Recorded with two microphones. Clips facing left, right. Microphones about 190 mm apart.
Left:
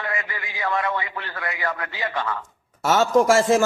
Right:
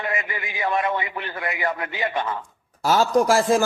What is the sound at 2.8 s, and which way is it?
Speech, 75° left (ahead or behind).